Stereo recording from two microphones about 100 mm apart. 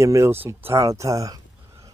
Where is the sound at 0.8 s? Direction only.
35° right (ahead or behind).